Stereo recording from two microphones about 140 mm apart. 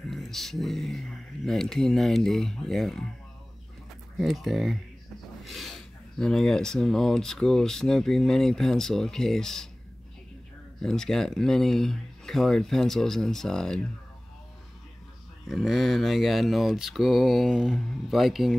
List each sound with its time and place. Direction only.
0.1 s speech: centre (ahead or behind)
4.2 s speech: centre (ahead or behind)
10.8 s speech: 5° left (ahead or behind)
15.4 s speech: centre (ahead or behind)